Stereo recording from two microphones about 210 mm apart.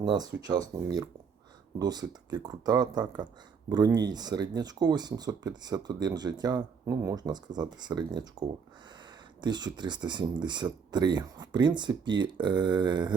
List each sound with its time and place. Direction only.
0.0 s speech: 20° right (ahead or behind)